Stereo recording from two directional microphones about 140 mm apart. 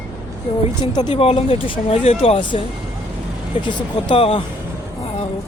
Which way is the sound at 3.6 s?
40° left (ahead or behind).